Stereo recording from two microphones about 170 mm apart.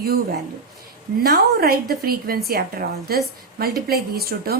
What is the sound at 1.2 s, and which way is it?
A woman's voice, 65° right (ahead or behind).